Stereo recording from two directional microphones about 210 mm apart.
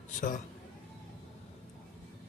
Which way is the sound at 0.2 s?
40° left (ahead or behind).